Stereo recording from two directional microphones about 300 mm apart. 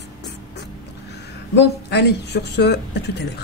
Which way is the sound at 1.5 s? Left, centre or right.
Left.